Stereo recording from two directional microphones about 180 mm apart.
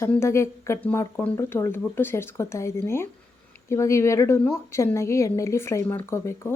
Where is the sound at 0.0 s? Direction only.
15° left (ahead or behind).